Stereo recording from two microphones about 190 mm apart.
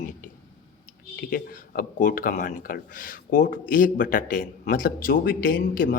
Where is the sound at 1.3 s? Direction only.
50° left (ahead or behind).